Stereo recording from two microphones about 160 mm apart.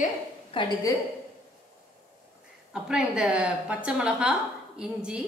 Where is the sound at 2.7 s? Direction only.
5° right (ahead or behind).